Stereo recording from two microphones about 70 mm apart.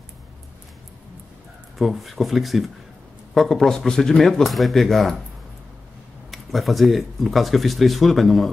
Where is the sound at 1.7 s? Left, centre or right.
Centre.